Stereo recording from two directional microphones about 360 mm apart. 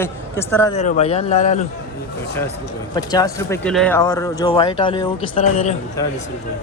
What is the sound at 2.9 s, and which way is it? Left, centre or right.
Speech, centre.